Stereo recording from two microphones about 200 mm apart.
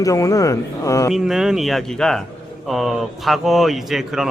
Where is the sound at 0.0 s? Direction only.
15° left (ahead or behind).